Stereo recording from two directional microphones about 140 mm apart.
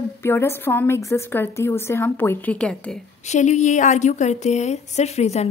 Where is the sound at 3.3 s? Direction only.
55° left (ahead or behind).